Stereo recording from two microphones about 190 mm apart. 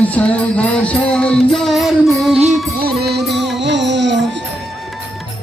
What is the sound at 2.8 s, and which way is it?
Music, 55° right (ahead or behind).